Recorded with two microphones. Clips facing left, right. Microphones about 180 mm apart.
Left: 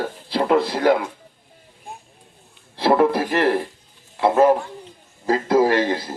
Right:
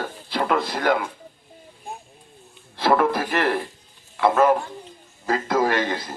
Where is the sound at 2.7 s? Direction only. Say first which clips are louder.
Left 3 dB; 30° left (ahead or behind).